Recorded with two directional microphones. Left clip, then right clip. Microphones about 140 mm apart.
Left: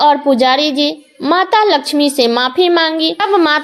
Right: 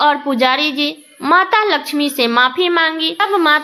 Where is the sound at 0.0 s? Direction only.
20° left (ahead or behind).